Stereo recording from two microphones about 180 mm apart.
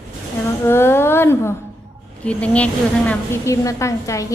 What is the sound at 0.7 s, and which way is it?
A woman's voice, 15° left (ahead or behind).